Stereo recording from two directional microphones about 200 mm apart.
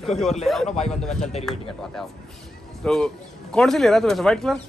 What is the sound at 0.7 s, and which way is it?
Speech, 35° left (ahead or behind).